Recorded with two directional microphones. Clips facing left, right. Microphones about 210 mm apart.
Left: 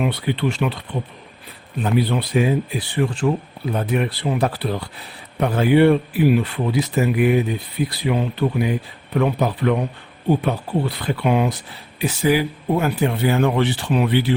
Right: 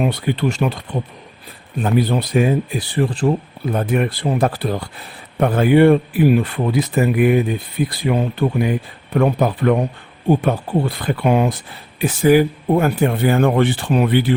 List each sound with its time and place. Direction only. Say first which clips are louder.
0.0 s speech: right 2 dB; 45° right (ahead or behind)
3.7 s speech: right 3 dB; 50° right (ahead or behind)